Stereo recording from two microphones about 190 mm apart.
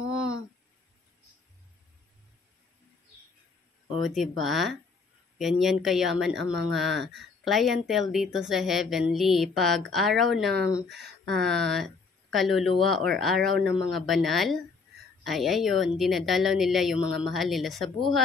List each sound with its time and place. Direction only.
4.0 s speech: centre (ahead or behind)